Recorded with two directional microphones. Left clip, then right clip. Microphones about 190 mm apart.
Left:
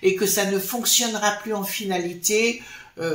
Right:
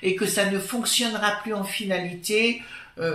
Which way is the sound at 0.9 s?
45° left (ahead or behind).